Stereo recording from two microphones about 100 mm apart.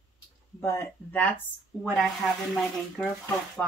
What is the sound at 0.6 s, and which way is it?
Speech, 25° left (ahead or behind).